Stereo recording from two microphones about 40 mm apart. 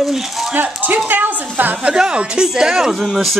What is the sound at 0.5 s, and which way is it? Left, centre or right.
A woman's voice, right.